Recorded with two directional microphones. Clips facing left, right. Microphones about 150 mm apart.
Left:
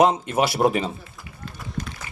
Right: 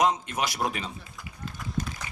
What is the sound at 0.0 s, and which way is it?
Speech, 30° left (ahead or behind).